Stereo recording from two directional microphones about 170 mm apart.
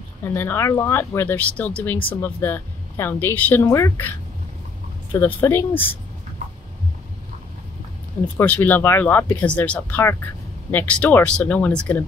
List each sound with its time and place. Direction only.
0.2 s speech: 15° left (ahead or behind)
5.1 s speech: 15° left (ahead or behind)
8.4 s speech: 10° left (ahead or behind)